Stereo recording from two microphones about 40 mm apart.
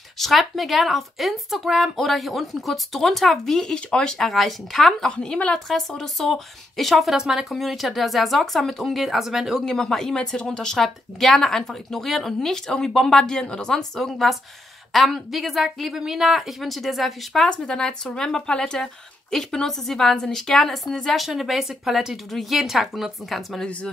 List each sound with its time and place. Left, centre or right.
0.2 s a woman's voice: centre
3.5 s speech: centre
4.2 s a woman's voice: centre
5.0 s speech: left
5.7 s a woman's voice: centre
7.2 s speech: centre
7.4 s a woman's voice: centre
9.7 s a woman's voice: centre
17.5 s speech: centre
21.3 s a woman's voice: centre